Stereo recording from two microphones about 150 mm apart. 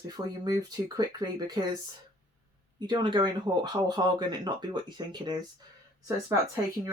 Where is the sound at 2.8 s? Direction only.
30° right (ahead or behind).